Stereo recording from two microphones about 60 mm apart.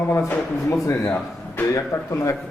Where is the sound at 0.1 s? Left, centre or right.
Left.